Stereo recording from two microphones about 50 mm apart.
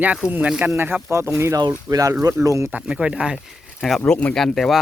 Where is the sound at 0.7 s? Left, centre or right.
Right.